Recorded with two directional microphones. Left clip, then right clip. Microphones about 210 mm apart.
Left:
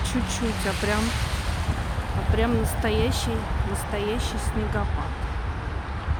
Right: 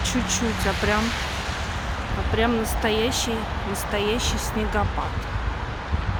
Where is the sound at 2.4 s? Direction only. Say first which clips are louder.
Right 3 dB; centre (ahead or behind).